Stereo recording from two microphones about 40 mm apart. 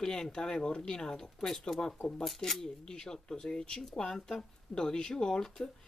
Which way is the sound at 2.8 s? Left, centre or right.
Centre.